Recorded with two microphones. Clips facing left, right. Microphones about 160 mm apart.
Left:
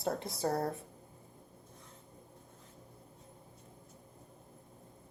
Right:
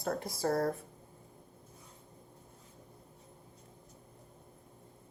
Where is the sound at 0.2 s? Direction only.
20° left (ahead or behind).